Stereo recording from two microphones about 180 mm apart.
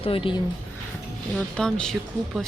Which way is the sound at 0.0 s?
30° left (ahead or behind).